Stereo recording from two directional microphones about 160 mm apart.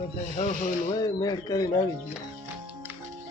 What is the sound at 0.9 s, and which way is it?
Speech, 25° left (ahead or behind).